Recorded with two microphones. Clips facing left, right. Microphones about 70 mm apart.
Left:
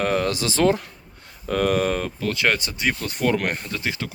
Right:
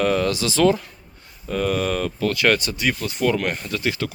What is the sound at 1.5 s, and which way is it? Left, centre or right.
Speech, left.